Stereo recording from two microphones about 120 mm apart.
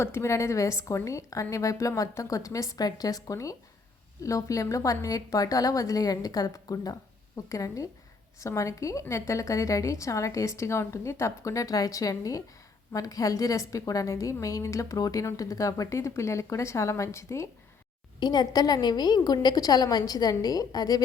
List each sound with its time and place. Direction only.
0.0 s a woman's voice: 20° left (ahead or behind)
18.2 s a woman's voice: 35° left (ahead or behind)